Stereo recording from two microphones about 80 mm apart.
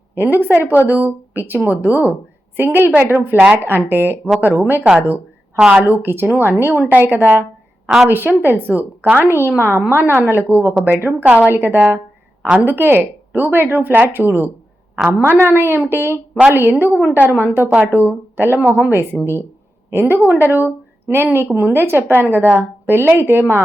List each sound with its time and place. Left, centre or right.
0.2 s a woman's voice: right
5.8 s a woman's voice: right